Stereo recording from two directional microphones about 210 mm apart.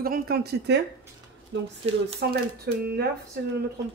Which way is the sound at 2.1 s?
50° right (ahead or behind).